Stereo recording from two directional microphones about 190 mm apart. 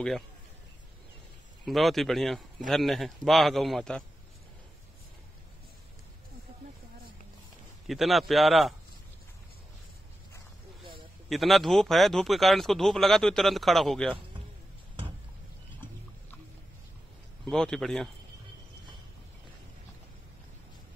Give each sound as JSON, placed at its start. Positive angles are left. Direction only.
{"t": 1.7, "sound": "speech", "side_deg": 0}
{"t": 7.8, "sound": "speech", "side_deg": 0}
{"t": 10.8, "sound": "a sound", "side_deg": -25}
{"t": 11.2, "sound": "speech", "side_deg": 0}
{"t": 17.5, "sound": "speech", "side_deg": 0}